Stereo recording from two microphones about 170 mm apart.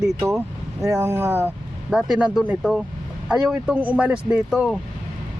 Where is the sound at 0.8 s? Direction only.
15° right (ahead or behind).